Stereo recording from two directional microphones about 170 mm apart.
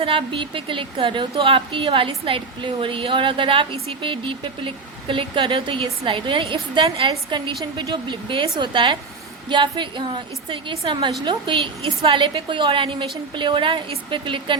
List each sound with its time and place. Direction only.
0.0 s a woman's voice: 30° right (ahead or behind)